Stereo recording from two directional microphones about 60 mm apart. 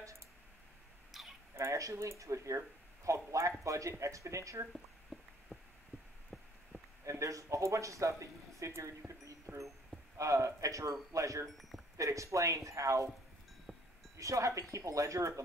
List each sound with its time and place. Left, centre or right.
1.1 s a sound: centre
1.5 s speech: right
4.7 s a sound: centre
7.1 s speech: right
9.5 s a sound: centre
10.1 s speech: right
11.4 s speech: centre
12.0 s speech: right
14.1 s speech: right